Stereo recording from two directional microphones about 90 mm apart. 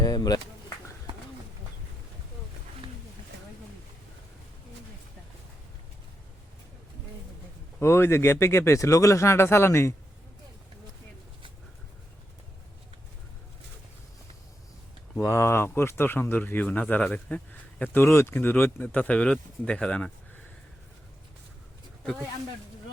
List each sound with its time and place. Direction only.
0.0 s a sound: 45° left (ahead or behind)
7.8 s speech: 30° left (ahead or behind)
15.2 s speech: 30° left (ahead or behind); by 20.4 s 15° left (ahead or behind)